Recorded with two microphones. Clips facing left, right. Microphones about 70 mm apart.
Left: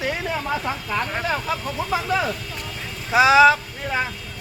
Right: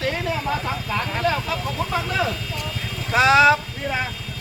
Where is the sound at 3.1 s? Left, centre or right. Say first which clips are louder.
Left 1 dB; centre.